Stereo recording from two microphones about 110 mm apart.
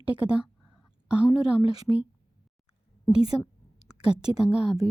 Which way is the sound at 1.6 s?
60° left (ahead or behind).